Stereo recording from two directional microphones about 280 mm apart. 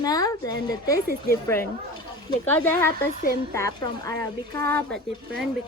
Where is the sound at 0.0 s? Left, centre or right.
Centre.